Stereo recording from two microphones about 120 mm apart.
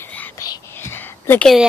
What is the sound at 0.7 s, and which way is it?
Whispering, 20° left (ahead or behind).